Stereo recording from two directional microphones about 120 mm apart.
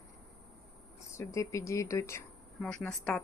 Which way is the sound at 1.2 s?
25° left (ahead or behind).